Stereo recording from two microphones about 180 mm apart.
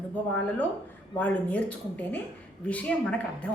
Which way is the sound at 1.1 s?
10° left (ahead or behind).